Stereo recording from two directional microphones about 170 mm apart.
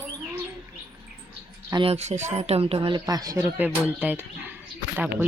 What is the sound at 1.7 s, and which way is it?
Speech, 30° right (ahead or behind).